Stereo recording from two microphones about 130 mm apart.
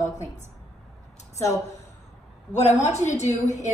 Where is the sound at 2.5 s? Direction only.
60° left (ahead or behind).